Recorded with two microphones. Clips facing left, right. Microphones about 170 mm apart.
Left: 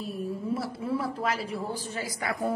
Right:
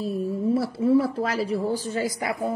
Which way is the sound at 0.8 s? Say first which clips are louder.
Right 10 dB; 25° right (ahead or behind).